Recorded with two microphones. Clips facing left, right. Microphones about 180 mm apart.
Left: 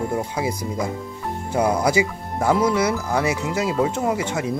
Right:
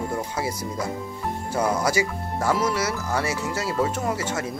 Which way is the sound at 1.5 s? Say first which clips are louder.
Left 4 dB; 15° left (ahead or behind).